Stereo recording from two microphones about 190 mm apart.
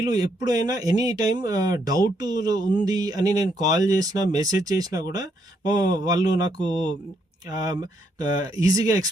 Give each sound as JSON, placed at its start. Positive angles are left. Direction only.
{"t": 0.0, "sound": "speech", "side_deg": -20}